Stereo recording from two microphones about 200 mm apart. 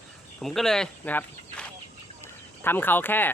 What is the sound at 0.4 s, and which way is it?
Speech, centre (ahead or behind).